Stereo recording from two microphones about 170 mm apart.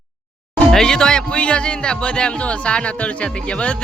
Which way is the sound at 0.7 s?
5° left (ahead or behind).